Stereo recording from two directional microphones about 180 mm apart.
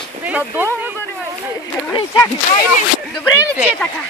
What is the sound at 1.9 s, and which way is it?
Speech, 25° left (ahead or behind).